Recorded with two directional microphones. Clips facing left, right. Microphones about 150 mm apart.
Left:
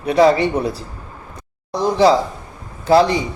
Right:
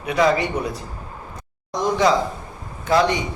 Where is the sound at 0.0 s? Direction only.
30° left (ahead or behind).